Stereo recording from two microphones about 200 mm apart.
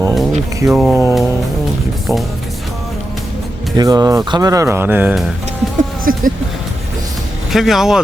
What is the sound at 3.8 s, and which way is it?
Speech, 20° right (ahead or behind).